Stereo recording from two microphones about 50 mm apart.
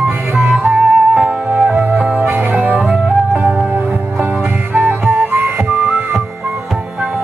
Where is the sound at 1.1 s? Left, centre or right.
Centre.